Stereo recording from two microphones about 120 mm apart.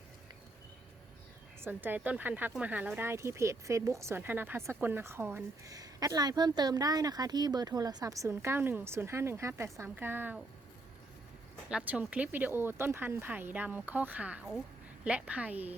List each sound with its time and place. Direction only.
1.6 s speech: 15° right (ahead or behind)
11.9 s speech: 10° right (ahead or behind)